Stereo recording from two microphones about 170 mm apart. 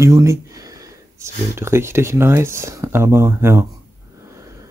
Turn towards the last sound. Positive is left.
turn(degrees=-15)  # may be behind; listen again after turning